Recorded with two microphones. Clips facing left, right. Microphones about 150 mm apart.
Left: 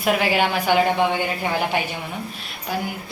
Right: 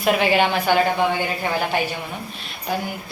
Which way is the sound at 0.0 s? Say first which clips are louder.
Right 2 dB; 5° left (ahead or behind).